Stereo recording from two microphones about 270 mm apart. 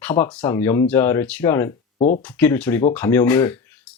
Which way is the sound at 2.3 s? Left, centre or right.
Centre.